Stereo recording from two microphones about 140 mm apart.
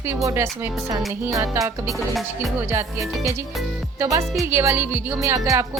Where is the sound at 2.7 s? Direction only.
25° right (ahead or behind).